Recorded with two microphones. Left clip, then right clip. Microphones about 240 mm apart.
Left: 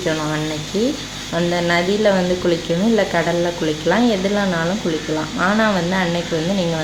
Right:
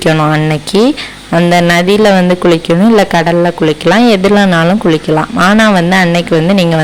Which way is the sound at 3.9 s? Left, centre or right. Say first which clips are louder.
Right 10 dB; right.